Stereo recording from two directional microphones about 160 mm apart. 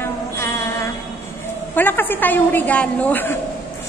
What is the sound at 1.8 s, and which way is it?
A woman's voice, 10° left (ahead or behind).